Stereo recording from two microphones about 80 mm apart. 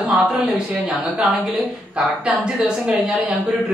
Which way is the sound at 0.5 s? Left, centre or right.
Centre.